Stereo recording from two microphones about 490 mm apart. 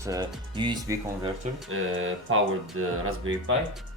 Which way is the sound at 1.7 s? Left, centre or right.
Right.